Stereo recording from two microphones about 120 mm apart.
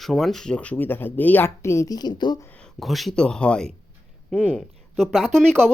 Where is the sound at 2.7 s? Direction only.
Centre (ahead or behind).